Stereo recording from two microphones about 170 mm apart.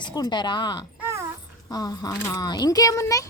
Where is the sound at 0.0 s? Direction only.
25° left (ahead or behind).